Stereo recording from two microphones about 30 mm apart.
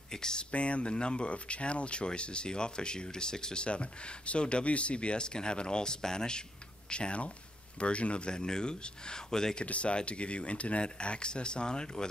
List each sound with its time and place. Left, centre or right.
0.1 s speech: left
0.5 s speech: left
3.6 s speech: left
6.9 s speech: left
9.7 s speech: left
10.8 s speech: left